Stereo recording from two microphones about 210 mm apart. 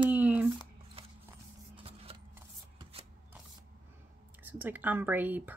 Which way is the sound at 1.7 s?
25° right (ahead or behind).